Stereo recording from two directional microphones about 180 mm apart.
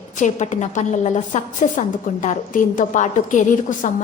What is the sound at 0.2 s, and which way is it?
A woman's voice, 40° left (ahead or behind).